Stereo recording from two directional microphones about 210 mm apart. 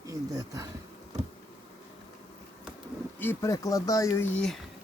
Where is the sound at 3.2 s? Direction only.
10° left (ahead or behind).